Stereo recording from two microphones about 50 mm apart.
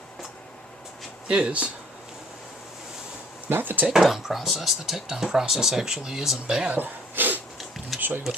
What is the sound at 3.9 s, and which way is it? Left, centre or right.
Speech, centre.